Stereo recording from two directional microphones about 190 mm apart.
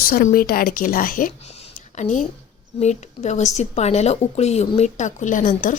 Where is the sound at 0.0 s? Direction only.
45° left (ahead or behind).